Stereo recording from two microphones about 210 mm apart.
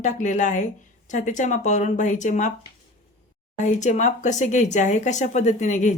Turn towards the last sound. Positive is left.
turn(degrees=35)  # may be behind; listen again after turning